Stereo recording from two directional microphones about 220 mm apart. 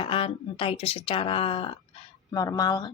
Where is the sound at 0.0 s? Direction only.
25° left (ahead or behind).